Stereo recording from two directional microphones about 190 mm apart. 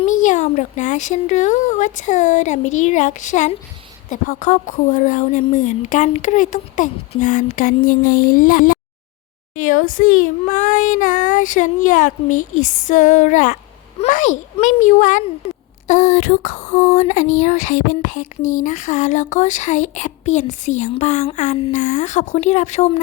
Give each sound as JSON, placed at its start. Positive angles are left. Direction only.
{"t": 0.1, "sound": "a child's voice", "side_deg": 40}